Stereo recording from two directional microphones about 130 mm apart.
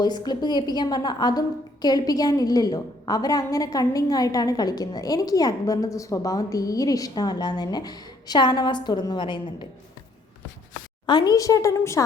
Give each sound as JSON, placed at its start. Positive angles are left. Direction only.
{"t": 0.0, "sound": "a woman's voice", "side_deg": 35}
{"t": 11.0, "sound": "a woman's voice", "side_deg": 35}